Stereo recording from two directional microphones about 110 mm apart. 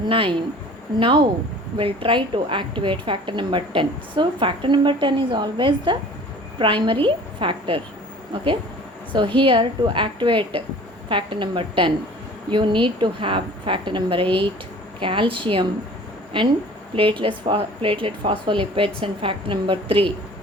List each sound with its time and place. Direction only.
0.1 s a woman's voice: 50° right (ahead or behind)
9.1 s a woman's voice: 45° right (ahead or behind)
16.9 s a woman's voice: 50° right (ahead or behind)